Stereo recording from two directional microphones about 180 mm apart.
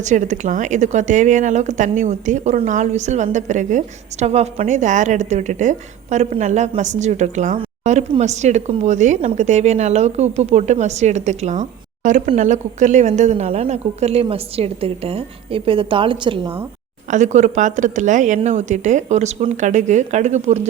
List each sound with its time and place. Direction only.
0.0 s speech: 45° right (ahead or behind); by 16.5 s 30° right (ahead or behind)
17.1 s speech: 40° right (ahead or behind)